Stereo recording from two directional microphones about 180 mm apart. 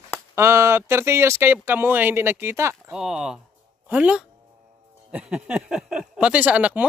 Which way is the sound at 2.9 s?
Centre (ahead or behind).